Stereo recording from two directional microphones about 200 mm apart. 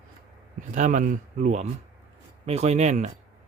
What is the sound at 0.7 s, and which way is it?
Speech, 40° right (ahead or behind).